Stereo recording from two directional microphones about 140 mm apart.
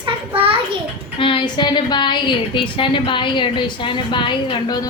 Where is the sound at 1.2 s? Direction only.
35° left (ahead or behind).